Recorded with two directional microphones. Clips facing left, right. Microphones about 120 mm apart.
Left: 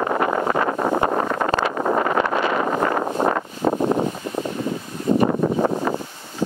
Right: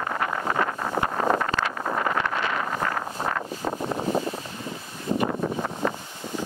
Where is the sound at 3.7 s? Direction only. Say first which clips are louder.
Left 10 dB; 60° left (ahead or behind).